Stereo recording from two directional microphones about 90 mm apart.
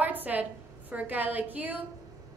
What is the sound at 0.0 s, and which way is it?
A woman's voice, 20° right (ahead or behind).